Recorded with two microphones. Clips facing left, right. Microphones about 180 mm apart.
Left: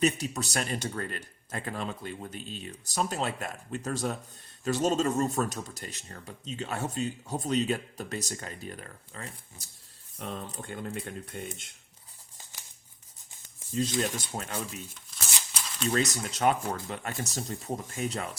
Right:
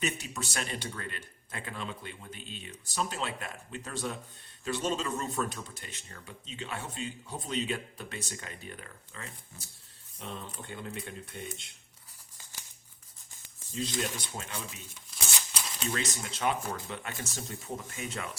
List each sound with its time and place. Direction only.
0.0 s speech: 40° left (ahead or behind)
13.8 s speech: 45° left (ahead or behind)
15.9 s speech: 45° left (ahead or behind)